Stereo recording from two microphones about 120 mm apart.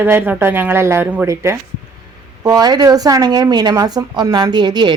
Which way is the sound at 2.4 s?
35° right (ahead or behind).